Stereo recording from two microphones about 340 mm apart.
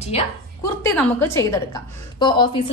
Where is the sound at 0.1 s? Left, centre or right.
Centre.